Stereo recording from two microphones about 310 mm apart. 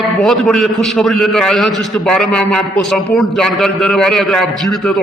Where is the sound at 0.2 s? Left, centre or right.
Centre.